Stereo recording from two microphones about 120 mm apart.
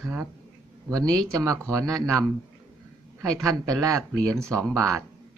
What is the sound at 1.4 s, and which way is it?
Speech, 25° right (ahead or behind).